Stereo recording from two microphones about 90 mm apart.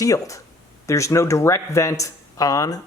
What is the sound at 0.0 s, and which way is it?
Speech, 35° left (ahead or behind).